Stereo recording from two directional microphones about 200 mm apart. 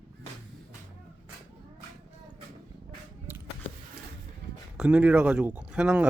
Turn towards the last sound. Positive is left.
turn(degrees=-5)  # may be behind; listen again after turning